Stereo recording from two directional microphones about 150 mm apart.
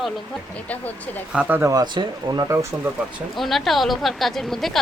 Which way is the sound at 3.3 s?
Centre (ahead or behind).